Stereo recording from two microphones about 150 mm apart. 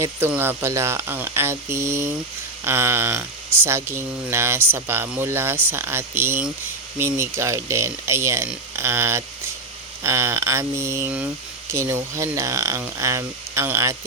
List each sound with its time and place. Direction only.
0.0 s speech: 15° right (ahead or behind)